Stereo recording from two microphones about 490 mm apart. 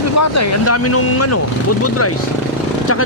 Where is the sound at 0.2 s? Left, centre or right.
Left.